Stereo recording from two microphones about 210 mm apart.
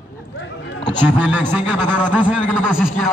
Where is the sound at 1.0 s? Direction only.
5° right (ahead or behind).